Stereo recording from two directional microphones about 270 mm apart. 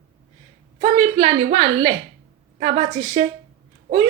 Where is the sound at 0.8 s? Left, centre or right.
Centre.